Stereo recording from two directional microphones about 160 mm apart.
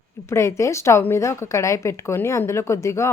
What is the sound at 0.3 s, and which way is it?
A woman's voice, 15° left (ahead or behind).